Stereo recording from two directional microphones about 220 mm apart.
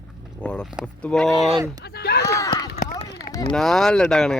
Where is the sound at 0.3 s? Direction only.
5° left (ahead or behind).